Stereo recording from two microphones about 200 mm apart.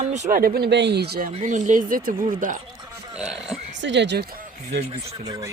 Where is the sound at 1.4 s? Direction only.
40° right (ahead or behind).